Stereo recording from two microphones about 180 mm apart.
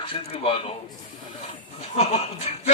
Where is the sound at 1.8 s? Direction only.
35° left (ahead or behind).